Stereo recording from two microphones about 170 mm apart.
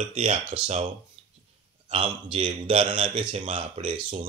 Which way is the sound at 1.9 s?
30° right (ahead or behind).